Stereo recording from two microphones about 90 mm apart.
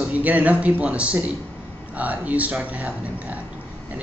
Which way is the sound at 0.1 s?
15° right (ahead or behind).